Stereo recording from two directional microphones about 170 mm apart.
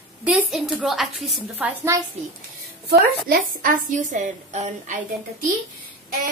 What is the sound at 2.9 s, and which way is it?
A woman's voice, 55° right (ahead or behind).